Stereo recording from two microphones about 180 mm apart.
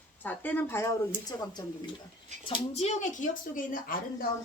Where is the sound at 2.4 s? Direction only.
35° left (ahead or behind); by 4.3 s 50° left (ahead or behind).